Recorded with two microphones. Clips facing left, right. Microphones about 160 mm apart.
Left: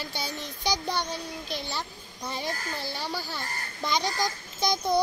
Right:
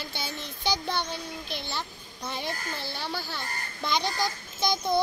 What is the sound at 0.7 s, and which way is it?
A child's voice, 15° left (ahead or behind).